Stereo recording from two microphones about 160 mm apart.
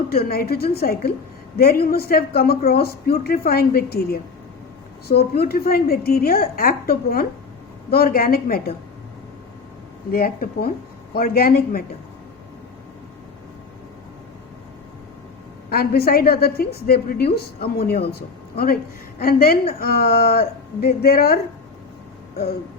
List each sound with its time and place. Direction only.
0.1 s a woman's voice: 75° left (ahead or behind)
10.1 s a woman's voice: 65° left (ahead or behind)
15.7 s a woman's voice: 75° left (ahead or behind)